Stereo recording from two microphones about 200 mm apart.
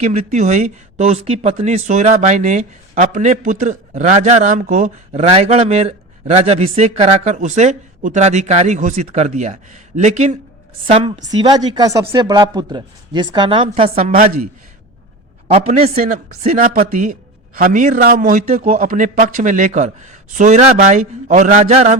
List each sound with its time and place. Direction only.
0.0 s speech: 35° right (ahead or behind)
15.5 s speech: 30° right (ahead or behind)